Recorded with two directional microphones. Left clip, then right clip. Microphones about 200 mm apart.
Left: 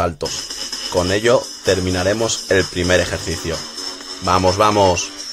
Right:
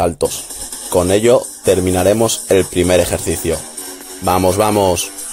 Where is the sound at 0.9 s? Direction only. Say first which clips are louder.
Right 4 dB; 20° right (ahead or behind).